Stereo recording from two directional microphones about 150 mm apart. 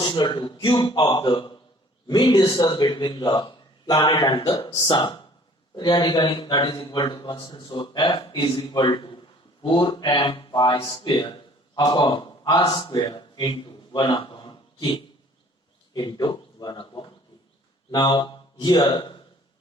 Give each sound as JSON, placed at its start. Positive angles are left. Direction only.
{"t": 0.0, "sound": "a man's voice", "side_deg": 30}